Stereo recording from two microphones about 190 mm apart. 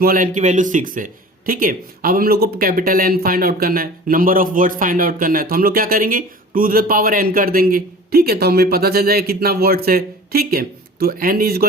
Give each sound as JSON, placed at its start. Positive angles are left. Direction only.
{"t": 0.0, "sound": "speech", "side_deg": -45}